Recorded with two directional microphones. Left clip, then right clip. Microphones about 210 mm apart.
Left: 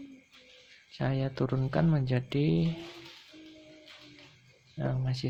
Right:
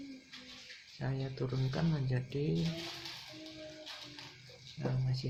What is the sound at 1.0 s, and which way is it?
Speech, 45° left (ahead or behind).